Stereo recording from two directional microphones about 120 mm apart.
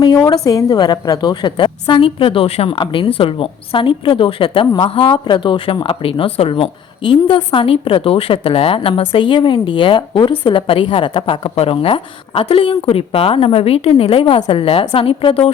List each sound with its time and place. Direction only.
0.0 s speech: 35° left (ahead or behind)
4.6 s speech: 30° left (ahead or behind)
4.9 s speech: 45° left (ahead or behind)